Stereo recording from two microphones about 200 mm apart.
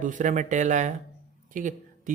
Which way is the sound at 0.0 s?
40° right (ahead or behind).